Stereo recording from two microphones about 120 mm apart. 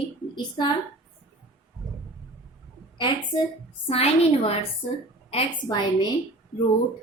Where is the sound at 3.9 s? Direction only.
55° left (ahead or behind).